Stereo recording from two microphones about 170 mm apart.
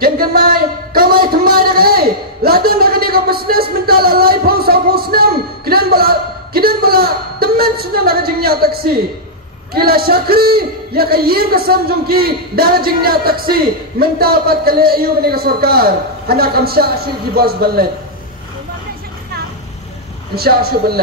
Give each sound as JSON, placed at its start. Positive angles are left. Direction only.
{"t": 0.0, "sound": "a sound", "side_deg": -60}
{"t": 9.8, "sound": "a man's voice", "side_deg": -60}
{"t": 20.3, "sound": "a man's voice", "side_deg": -65}